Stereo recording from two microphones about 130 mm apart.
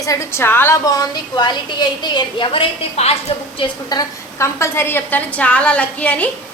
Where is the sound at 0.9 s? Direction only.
30° left (ahead or behind); by 3.7 s 55° left (ahead or behind).